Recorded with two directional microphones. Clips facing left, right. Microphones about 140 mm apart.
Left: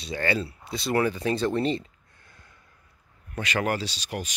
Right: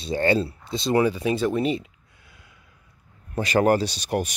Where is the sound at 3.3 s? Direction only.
40° right (ahead or behind).